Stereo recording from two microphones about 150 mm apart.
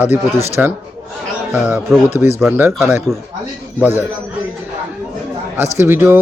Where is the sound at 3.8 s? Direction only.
15° right (ahead or behind).